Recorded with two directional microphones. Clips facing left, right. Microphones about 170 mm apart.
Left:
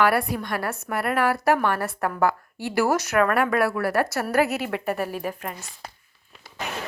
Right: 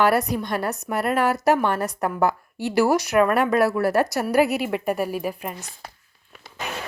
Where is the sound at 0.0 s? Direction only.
20° right (ahead or behind).